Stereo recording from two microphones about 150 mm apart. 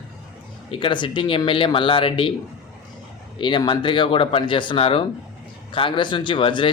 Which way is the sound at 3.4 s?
30° left (ahead or behind).